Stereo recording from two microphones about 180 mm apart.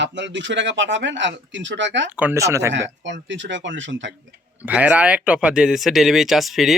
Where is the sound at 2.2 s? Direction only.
15° right (ahead or behind).